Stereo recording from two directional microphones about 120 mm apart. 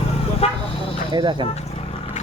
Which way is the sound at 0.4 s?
55° left (ahead or behind).